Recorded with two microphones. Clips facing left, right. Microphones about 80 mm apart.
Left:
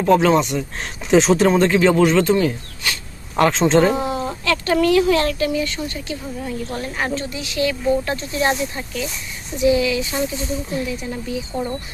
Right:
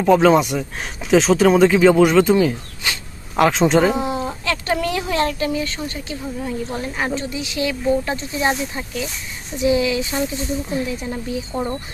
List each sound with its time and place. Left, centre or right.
0.0 s speech: centre
3.9 s speech: centre
9.6 s speech: right